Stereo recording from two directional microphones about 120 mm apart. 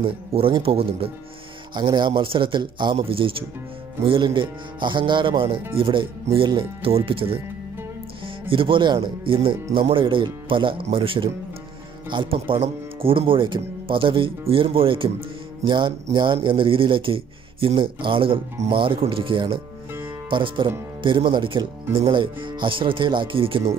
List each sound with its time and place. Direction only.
0.0 s speech: 50° right (ahead or behind)
1.7 s speech: 40° right (ahead or behind)
8.5 s speech: 45° right (ahead or behind)